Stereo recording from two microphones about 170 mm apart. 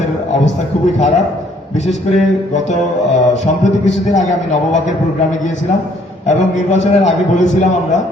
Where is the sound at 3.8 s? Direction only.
45° left (ahead or behind).